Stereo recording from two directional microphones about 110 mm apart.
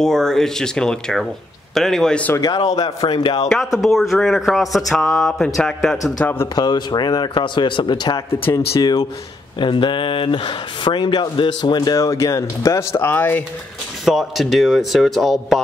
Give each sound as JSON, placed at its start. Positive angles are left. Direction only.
{"t": 0.0, "sound": "a man's voice", "side_deg": 5}
{"t": 2.3, "sound": "speech", "side_deg": 35}
{"t": 3.4, "sound": "a man's voice", "side_deg": 0}
{"t": 6.5, "sound": "speech", "side_deg": 40}
{"t": 14.0, "sound": "a man's voice", "side_deg": 0}